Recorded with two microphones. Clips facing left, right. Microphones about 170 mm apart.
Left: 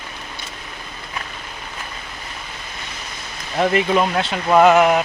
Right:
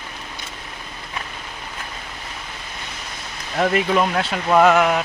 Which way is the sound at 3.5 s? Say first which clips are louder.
Left 1 dB; 5° left (ahead or behind).